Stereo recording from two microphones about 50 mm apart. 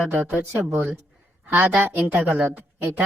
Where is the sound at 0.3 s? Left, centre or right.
Right.